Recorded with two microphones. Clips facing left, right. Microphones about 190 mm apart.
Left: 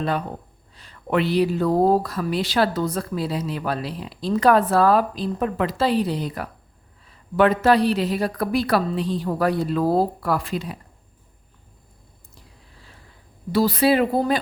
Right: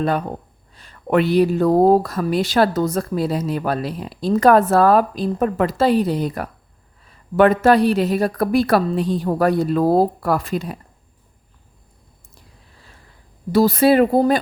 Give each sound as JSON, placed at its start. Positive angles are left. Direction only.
{"t": 0.8, "sound": "speech", "side_deg": -50}
{"t": 13.5, "sound": "speech", "side_deg": -45}